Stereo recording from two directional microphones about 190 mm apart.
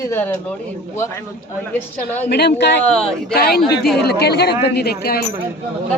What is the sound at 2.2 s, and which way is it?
Speech, 60° left (ahead or behind).